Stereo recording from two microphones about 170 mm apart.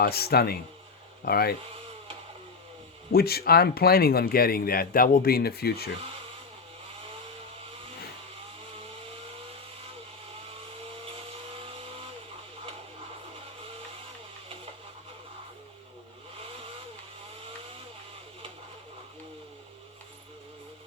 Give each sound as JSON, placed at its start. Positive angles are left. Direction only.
{"t": 0.0, "sound": "speech", "side_deg": 65}
{"t": 3.1, "sound": "speech", "side_deg": 65}